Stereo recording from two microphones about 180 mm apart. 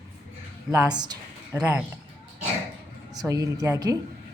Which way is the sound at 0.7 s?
20° right (ahead or behind).